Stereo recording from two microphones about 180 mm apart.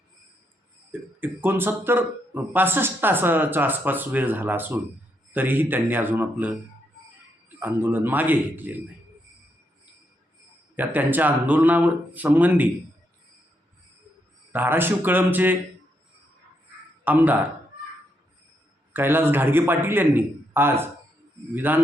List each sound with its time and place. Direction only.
0.9 s speech: 10° right (ahead or behind)
7.6 s speech: 10° right (ahead or behind)
10.8 s speech: 10° right (ahead or behind)
14.5 s speech: 10° right (ahead or behind)
17.0 s a man's voice: 10° right (ahead or behind)
18.9 s speech: 10° right (ahead or behind)